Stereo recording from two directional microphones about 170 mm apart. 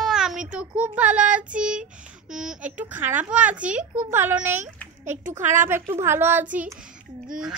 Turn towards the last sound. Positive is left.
turn(degrees=-10)  # may be behind; listen again after turning